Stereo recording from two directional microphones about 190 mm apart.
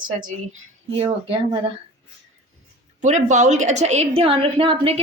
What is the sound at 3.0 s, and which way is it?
A woman's voice, 40° right (ahead or behind).